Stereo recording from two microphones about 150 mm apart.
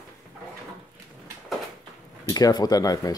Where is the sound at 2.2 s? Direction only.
25° left (ahead or behind).